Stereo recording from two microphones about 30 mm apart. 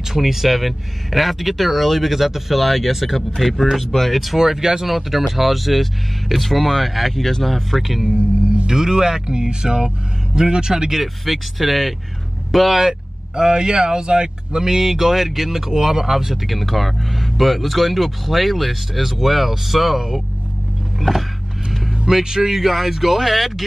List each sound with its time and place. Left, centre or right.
0.1 s speech: centre
4.4 s speech: centre
4.8 s speech: centre
8.2 s music: right
8.6 s speech: centre
10.9 s speech: centre
12.4 s vehicle: centre
13.4 s speech: right
14.9 s speech: centre
16.4 s speech: centre
21.0 s a sound: centre
22.2 s speech: centre
22.5 s speech: centre